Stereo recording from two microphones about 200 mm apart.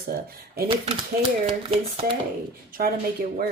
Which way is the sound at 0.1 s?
50° right (ahead or behind).